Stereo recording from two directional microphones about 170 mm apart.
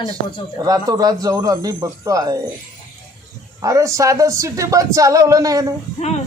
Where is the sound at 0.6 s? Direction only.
20° right (ahead or behind).